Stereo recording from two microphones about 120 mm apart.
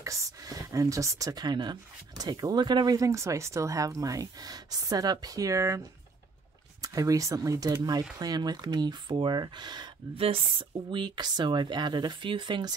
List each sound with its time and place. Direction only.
0.0 s speech: 30° right (ahead or behind)
6.8 s speech: 30° right (ahead or behind)